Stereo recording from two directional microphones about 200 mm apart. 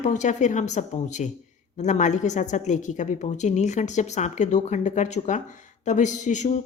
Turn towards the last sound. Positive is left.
turn(degrees=35)  # may be behind; listen again after turning